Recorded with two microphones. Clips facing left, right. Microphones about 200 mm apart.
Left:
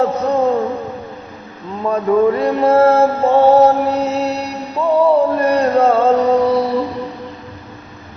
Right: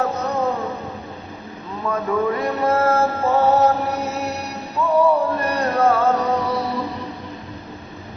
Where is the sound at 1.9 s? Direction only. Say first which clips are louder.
Left 7 dB; 30° left (ahead or behind).